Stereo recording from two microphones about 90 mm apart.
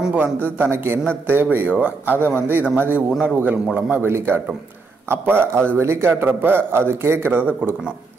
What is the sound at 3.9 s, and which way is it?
A man's voice, 25° right (ahead or behind).